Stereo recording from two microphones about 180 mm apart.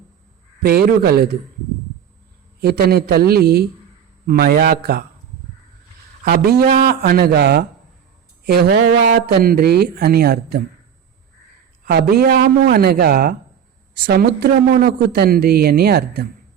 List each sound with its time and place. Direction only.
0.6 s speech: 60° right (ahead or behind)
2.6 s speech: 60° right (ahead or behind)
6.2 s speech: 60° right (ahead or behind)
11.9 s speech: 60° right (ahead or behind)